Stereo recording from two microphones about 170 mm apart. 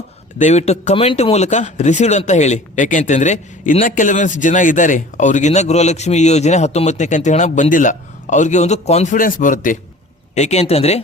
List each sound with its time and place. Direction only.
0.3 s speech: 45° left (ahead or behind)
10.3 s speech: 40° left (ahead or behind)